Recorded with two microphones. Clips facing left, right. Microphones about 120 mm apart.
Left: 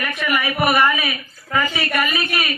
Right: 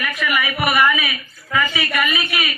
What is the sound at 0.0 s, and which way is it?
A man's voice, 30° left (ahead or behind).